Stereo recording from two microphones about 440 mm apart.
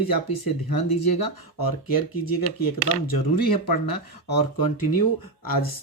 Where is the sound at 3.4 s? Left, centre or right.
Left.